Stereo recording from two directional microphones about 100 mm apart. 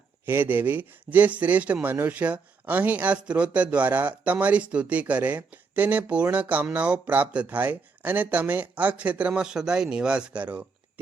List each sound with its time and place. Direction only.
0.3 s speech: 20° right (ahead or behind)